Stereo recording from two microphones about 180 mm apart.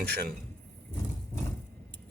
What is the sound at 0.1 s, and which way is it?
Speech, 60° right (ahead or behind).